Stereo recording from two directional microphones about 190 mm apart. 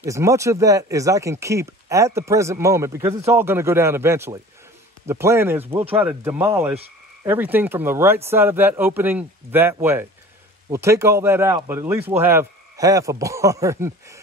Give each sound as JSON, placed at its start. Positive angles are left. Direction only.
{"t": 0.0, "sound": "speech", "side_deg": -15}